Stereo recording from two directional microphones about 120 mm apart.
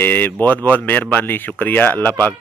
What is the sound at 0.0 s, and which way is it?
Speech, 15° left (ahead or behind).